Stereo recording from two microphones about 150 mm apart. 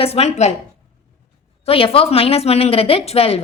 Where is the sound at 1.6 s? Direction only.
40° left (ahead or behind).